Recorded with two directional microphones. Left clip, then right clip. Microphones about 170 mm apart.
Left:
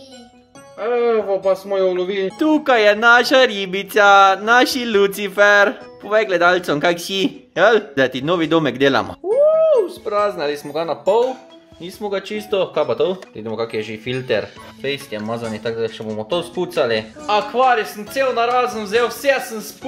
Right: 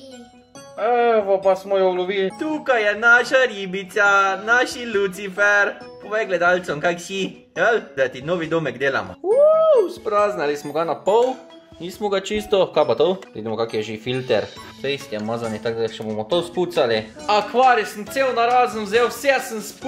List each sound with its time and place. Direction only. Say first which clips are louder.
0.8 s music: even; 20° left (ahead or behind)
1.7 s speech: left 1 dB; 25° left (ahead or behind)
2.3 s speech: left 5 dB; 55° left (ahead or behind)
9.7 s speech: even; 10° right (ahead or behind)
11.8 s speech: right 1 dB; 20° right (ahead or behind); by 17.0 s centre (ahead or behind)
17.3 s speech: even; 20° right (ahead or behind); by 19.7 s 5° right (ahead or behind)